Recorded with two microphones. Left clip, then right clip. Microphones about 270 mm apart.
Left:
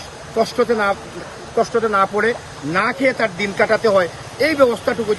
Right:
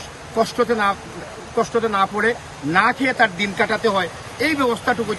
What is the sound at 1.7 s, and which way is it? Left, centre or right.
Speech, centre.